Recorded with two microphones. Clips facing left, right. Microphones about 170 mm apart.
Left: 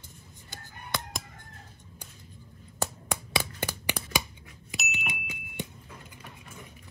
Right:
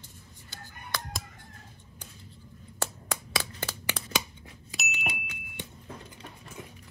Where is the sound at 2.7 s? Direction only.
15° left (ahead or behind).